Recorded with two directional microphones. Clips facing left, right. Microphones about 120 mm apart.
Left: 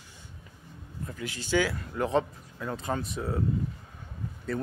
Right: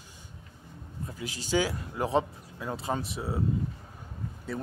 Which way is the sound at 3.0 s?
5° right (ahead or behind).